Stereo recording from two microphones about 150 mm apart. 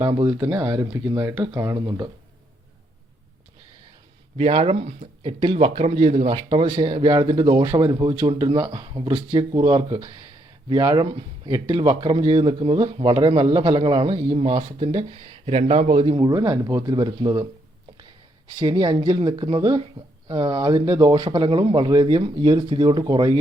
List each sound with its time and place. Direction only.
0.0 s speech: 35° right (ahead or behind)
4.4 s speech: 40° right (ahead or behind)
16.3 s speech: 20° right (ahead or behind)
18.6 s speech: 25° right (ahead or behind)